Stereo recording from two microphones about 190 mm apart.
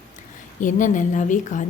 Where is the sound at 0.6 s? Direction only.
40° left (ahead or behind).